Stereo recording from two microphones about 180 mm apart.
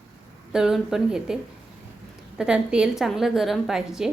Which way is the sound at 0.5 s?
5° right (ahead or behind).